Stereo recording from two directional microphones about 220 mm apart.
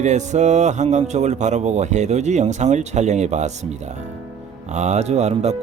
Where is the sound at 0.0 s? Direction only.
30° right (ahead or behind).